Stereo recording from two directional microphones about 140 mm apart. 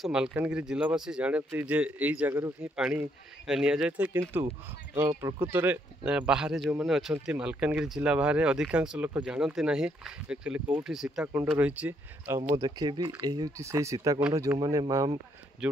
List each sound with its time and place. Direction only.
0.0 s speech: 5° right (ahead or behind)
5.5 s speech: 10° right (ahead or behind)
12.4 s speech: 30° right (ahead or behind)